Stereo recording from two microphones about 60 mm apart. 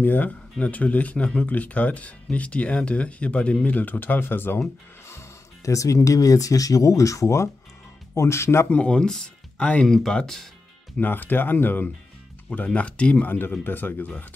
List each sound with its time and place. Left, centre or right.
0.0 s speech: left
5.7 s speech: left
8.1 s speech: left
8.6 s speech: centre
11.0 s speech: left
12.4 s speech: left
13.7 s speech: left